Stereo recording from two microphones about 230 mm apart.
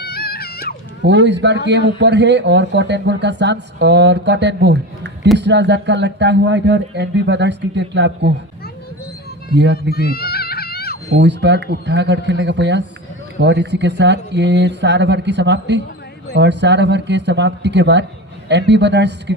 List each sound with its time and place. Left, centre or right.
0.0 s music: left
1.0 s speech: right
9.9 s baby cry: left
11.2 s speech: right